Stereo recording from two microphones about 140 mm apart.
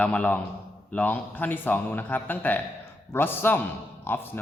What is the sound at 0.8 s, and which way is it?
A man's voice, 10° left (ahead or behind).